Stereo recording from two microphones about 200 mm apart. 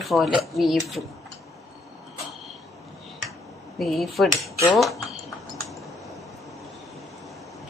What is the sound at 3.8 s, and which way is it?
Speech, centre (ahead or behind).